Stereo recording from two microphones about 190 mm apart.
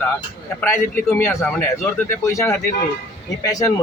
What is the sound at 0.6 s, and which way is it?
Speech, 10° left (ahead or behind).